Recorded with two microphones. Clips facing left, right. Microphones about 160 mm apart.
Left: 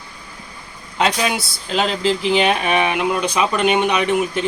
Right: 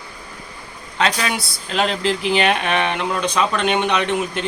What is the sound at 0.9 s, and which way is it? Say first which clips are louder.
Speech: left 2 dB; 5° left (ahead or behind).